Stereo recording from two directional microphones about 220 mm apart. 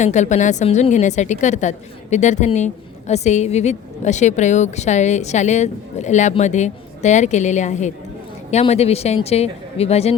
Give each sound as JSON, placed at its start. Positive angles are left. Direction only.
{"t": 0.0, "sound": "a woman's voice", "side_deg": 35}